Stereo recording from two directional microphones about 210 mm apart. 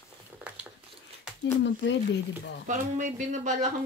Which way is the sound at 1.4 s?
55° left (ahead or behind).